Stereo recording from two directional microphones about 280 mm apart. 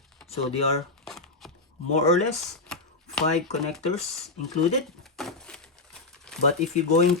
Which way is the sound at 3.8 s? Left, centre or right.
Left.